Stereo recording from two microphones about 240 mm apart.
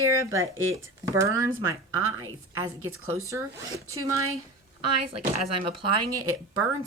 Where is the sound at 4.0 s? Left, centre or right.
Centre.